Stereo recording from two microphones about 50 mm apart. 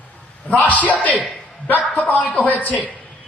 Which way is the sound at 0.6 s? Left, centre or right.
Left.